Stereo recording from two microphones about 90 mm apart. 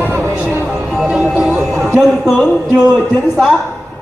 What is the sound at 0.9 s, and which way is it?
Music, 5° right (ahead or behind).